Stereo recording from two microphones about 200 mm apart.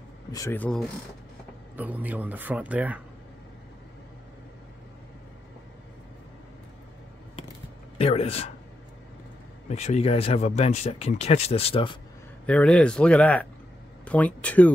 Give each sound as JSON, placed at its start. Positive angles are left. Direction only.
{"t": 0.3, "sound": "speech", "side_deg": 15}
{"t": 1.8, "sound": "speech", "side_deg": -10}
{"t": 8.0, "sound": "speech", "side_deg": 30}
{"t": 9.7, "sound": "speech", "side_deg": 35}
{"t": 12.4, "sound": "speech", "side_deg": 5}